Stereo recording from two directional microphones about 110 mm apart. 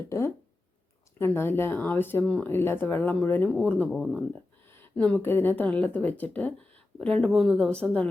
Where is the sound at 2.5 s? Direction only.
20° left (ahead or behind).